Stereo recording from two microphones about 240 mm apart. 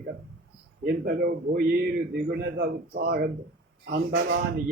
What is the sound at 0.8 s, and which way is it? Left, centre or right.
A man's voice, right.